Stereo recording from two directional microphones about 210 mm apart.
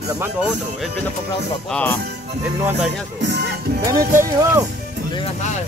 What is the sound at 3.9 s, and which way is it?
Speech, 40° right (ahead or behind).